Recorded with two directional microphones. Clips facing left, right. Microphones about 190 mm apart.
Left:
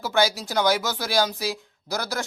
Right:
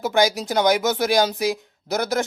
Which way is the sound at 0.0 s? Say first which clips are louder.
Right 3 dB; 15° right (ahead or behind).